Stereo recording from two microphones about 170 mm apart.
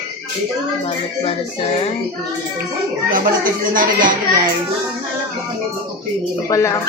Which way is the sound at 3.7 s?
55° right (ahead or behind).